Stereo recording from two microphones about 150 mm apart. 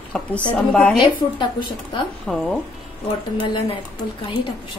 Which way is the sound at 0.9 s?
30° left (ahead or behind).